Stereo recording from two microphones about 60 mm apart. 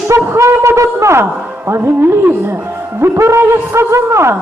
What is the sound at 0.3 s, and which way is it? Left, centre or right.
Wind instrument, right.